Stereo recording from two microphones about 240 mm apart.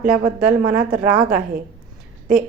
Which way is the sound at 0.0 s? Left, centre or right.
Centre.